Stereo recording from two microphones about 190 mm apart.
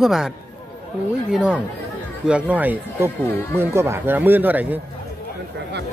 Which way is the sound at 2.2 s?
5° right (ahead or behind).